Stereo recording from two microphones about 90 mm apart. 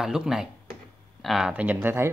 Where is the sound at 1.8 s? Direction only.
30° right (ahead or behind).